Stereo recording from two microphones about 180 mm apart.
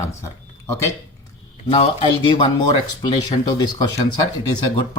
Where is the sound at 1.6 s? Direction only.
30° left (ahead or behind).